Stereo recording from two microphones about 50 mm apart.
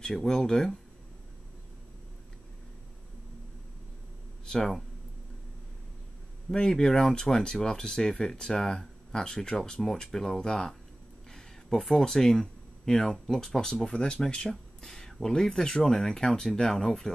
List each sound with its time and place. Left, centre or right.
0.0 s speech: centre
4.5 s speech: centre
6.5 s speech: centre
11.8 s speech: centre